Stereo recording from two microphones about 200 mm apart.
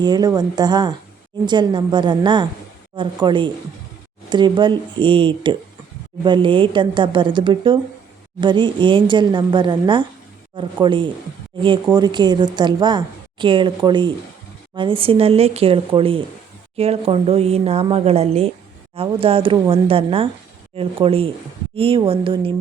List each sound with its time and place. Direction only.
0.0 s a woman's voice: 20° right (ahead or behind)